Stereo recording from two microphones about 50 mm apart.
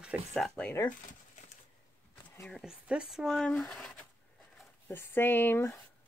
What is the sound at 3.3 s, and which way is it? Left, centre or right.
Speech, centre.